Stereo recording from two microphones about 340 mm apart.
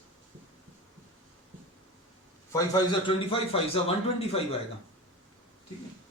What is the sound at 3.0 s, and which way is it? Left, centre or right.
A man's voice, centre.